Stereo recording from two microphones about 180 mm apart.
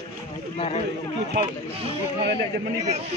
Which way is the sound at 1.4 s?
30° right (ahead or behind).